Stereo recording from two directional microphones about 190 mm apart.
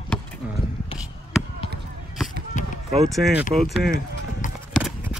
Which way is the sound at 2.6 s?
40° left (ahead or behind).